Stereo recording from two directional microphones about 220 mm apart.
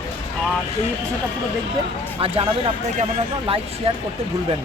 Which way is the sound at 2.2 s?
25° right (ahead or behind).